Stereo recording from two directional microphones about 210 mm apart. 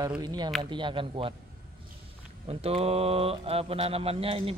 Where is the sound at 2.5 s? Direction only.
30° right (ahead or behind).